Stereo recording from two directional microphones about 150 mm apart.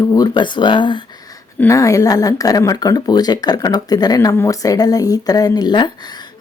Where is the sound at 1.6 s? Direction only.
20° left (ahead or behind).